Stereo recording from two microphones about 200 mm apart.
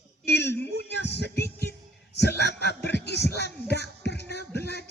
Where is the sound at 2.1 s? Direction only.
55° left (ahead or behind).